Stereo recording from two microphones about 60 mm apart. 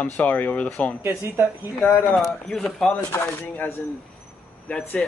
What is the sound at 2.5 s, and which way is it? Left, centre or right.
Speech, centre.